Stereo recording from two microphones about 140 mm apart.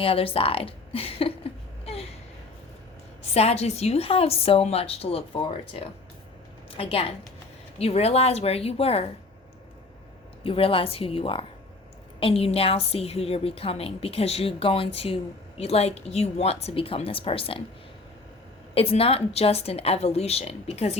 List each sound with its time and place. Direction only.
0.0 s speech: 40° left (ahead or behind)
1.8 s a sound: 45° left (ahead or behind)
3.3 s a woman's voice: 50° left (ahead or behind)
10.4 s a woman's voice: 40° left (ahead or behind)
18.7 s a woman's voice: 40° left (ahead or behind)